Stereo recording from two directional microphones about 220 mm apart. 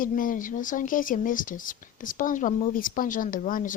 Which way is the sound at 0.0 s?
40° left (ahead or behind).